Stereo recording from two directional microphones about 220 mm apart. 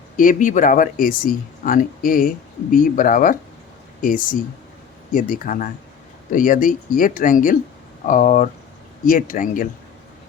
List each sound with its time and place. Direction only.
0.2 s speech: 35° left (ahead or behind)